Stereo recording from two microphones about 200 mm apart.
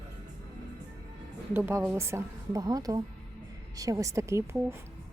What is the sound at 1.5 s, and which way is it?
Speech, 10° right (ahead or behind).